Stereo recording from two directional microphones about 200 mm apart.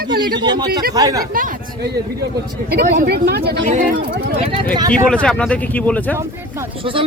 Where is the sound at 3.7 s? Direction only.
40° right (ahead or behind).